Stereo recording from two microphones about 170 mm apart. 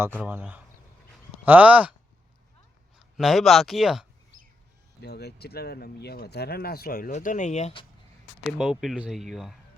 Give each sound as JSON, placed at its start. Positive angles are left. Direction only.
{"t": 0.2, "sound": "speech", "side_deg": -10}
{"t": 3.2, "sound": "speech", "side_deg": 0}
{"t": 5.0, "sound": "speech", "side_deg": 70}
{"t": 8.5, "sound": "speech", "side_deg": -5}